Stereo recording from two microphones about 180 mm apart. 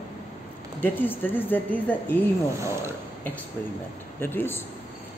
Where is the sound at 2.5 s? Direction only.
15° right (ahead or behind).